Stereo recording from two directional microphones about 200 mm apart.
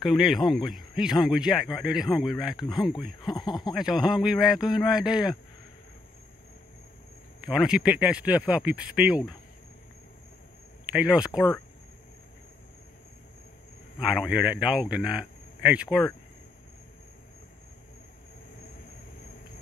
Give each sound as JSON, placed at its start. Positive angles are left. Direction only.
{"t": 0.0, "sound": "a man's voice", "side_deg": 0}
{"t": 3.3, "sound": "speech", "side_deg": 20}
{"t": 3.7, "sound": "a man's voice", "side_deg": 0}
{"t": 7.4, "sound": "a man's voice", "side_deg": -5}
{"t": 10.9, "sound": "speech", "side_deg": -5}
{"t": 13.9, "sound": "a man's voice", "side_deg": -5}